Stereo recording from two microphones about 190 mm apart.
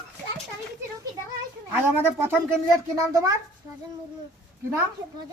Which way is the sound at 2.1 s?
10° right (ahead or behind).